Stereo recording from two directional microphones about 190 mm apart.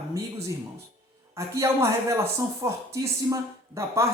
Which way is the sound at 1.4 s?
15° right (ahead or behind).